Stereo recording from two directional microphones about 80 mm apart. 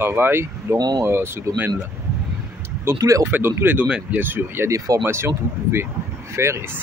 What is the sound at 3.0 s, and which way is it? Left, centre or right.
Speech, right.